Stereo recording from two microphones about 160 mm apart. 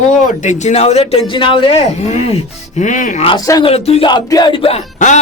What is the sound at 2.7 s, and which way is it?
Speech, 50° left (ahead or behind).